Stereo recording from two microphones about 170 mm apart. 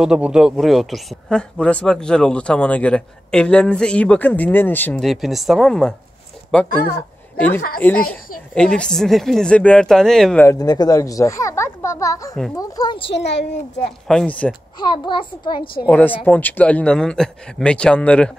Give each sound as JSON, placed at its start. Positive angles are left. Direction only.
{"t": 0.0, "sound": "speech", "side_deg": -5}
{"t": 5.0, "sound": "speech", "side_deg": 0}
{"t": 10.4, "sound": "speech", "side_deg": 20}
{"t": 13.1, "sound": "a child's voice", "side_deg": 90}
{"t": 14.0, "sound": "speech", "side_deg": 5}
{"t": 14.8, "sound": "speech", "side_deg": 25}
{"t": 15.9, "sound": "speech", "side_deg": 10}